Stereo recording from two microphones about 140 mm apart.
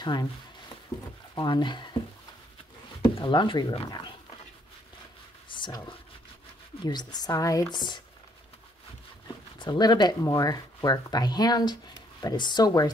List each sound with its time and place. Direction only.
0.0 s speech: 30° left (ahead or behind)
1.3 s speech: 30° left (ahead or behind)
3.2 s speech: 35° left (ahead or behind)
5.5 s a sound: 35° left (ahead or behind)
6.8 s speech: 30° left (ahead or behind)
9.6 s speech: 30° left (ahead or behind)